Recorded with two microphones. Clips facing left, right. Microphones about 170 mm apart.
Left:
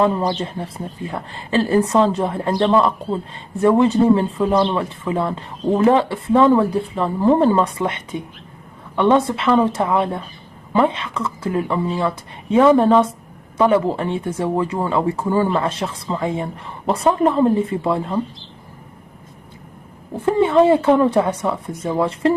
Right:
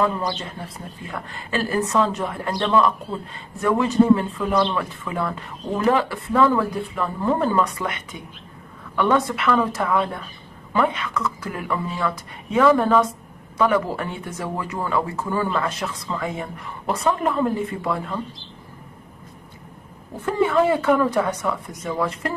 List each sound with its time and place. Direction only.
0.0 s a woman's voice: 30° left (ahead or behind)
20.2 s a woman's voice: 30° left (ahead or behind)